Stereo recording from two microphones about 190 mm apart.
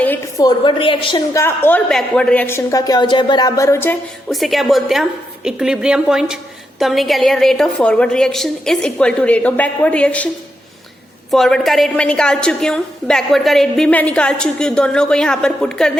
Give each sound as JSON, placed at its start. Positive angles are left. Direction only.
{"t": 0.0, "sound": "a sound", "side_deg": 10}
{"t": 0.4, "sound": "a woman's voice", "side_deg": 25}
{"t": 1.3, "sound": "a woman's voice", "side_deg": 10}
{"t": 4.3, "sound": "a woman's voice", "side_deg": 0}
{"t": 11.3, "sound": "a woman's voice", "side_deg": 0}